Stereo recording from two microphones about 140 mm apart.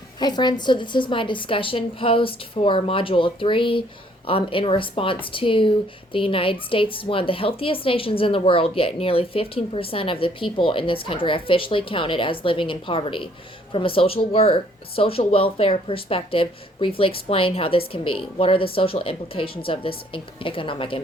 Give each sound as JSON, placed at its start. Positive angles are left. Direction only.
{"t": 0.2, "sound": "speech", "side_deg": 30}